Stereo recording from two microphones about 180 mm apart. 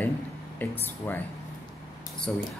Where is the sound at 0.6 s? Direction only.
10° left (ahead or behind).